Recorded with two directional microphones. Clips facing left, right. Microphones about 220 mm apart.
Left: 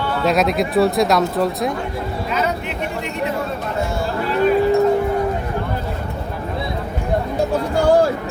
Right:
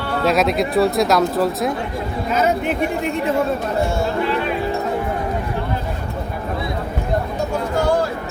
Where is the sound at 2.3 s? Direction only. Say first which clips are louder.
Right 5 dB; 45° right (ahead or behind).